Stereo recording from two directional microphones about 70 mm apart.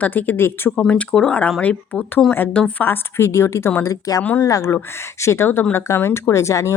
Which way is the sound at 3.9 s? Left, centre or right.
Left.